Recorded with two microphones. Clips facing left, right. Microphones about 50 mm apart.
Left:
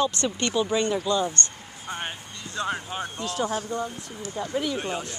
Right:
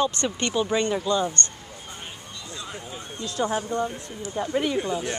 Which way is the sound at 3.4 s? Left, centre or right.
Right.